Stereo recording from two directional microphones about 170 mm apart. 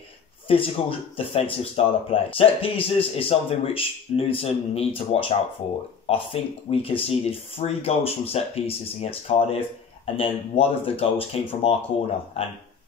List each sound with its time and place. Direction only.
0.5 s speech: 35° left (ahead or behind)